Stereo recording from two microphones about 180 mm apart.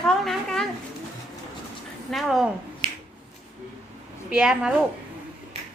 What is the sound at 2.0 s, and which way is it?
Speech, centre (ahead or behind).